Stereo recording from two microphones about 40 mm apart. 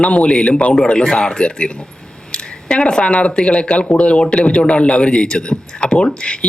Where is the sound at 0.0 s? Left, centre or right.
Left.